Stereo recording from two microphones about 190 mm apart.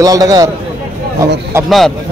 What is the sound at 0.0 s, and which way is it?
Speech, 20° right (ahead or behind).